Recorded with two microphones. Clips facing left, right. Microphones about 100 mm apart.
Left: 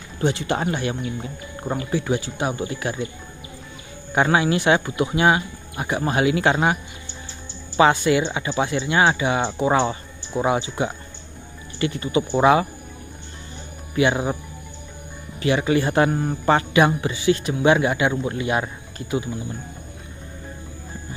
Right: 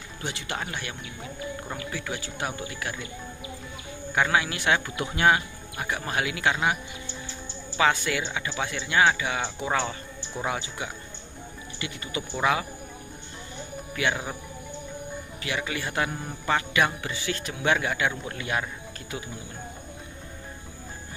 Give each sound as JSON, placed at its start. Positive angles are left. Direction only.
{"t": 0.2, "sound": "speech", "side_deg": 30}
{"t": 4.1, "sound": "speech", "side_deg": 30}
{"t": 7.7, "sound": "speech", "side_deg": 25}
{"t": 11.8, "sound": "speech", "side_deg": 40}
{"t": 13.9, "sound": "speech", "side_deg": 25}
{"t": 15.4, "sound": "speech", "side_deg": 30}
{"t": 16.7, "sound": "speech", "side_deg": 25}